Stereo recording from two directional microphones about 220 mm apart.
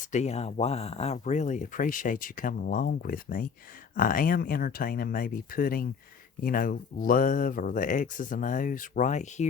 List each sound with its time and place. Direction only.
0.0 s speech: 30° left (ahead or behind)